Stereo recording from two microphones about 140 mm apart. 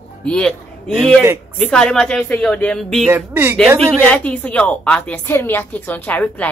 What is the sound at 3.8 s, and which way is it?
A woman's voice, 10° left (ahead or behind).